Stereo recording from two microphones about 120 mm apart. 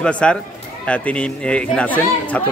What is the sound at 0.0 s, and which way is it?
Speech, 10° left (ahead or behind).